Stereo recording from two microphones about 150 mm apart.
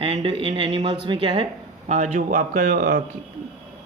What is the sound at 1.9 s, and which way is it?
Speech, 50° right (ahead or behind).